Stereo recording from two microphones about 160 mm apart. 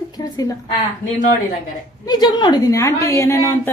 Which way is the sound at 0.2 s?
25° left (ahead or behind).